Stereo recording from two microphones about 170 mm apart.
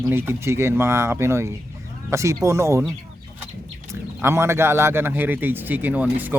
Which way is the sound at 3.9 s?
15° right (ahead or behind).